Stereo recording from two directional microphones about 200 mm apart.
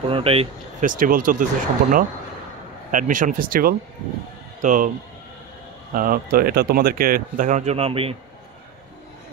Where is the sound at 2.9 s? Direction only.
40° right (ahead or behind).